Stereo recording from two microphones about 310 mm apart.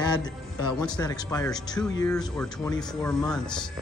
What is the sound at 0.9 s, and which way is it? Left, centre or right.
Speech, centre.